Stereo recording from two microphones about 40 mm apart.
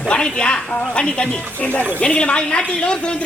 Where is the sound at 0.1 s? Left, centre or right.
Left.